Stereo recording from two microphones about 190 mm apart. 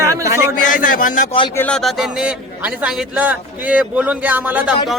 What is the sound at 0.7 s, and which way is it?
Speech, 45° left (ahead or behind).